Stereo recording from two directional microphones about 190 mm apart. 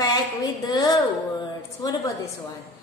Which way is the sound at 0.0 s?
20° left (ahead or behind).